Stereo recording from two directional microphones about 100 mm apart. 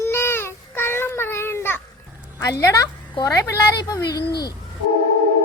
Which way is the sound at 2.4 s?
35° left (ahead or behind).